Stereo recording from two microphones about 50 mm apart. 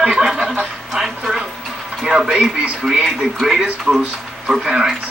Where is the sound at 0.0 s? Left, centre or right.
Centre.